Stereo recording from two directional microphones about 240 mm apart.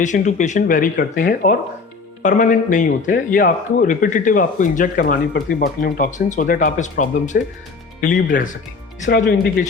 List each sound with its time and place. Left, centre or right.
0.0 s speech: left
9.0 s speech: left